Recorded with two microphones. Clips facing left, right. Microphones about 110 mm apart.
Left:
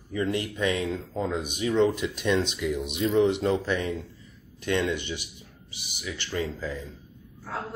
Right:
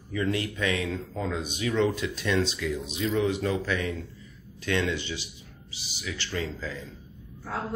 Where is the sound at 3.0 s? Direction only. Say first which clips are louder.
Left 4 dB; 30° left (ahead or behind).